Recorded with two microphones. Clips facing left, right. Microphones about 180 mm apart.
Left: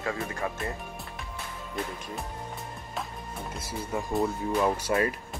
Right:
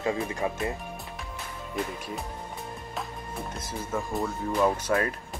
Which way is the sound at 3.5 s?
15° left (ahead or behind).